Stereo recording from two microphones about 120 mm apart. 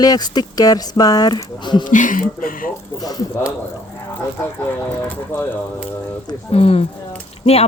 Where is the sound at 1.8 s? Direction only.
90° left.